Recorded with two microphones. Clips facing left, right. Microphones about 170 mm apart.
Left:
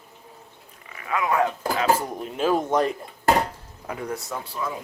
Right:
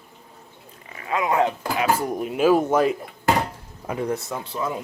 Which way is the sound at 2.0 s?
10° right (ahead or behind).